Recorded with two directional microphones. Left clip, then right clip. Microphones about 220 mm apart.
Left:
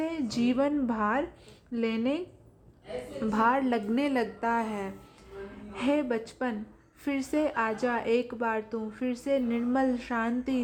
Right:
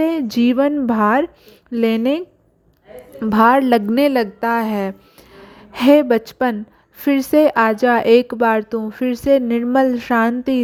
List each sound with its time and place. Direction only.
0.0 s a woman's voice: 40° right (ahead or behind)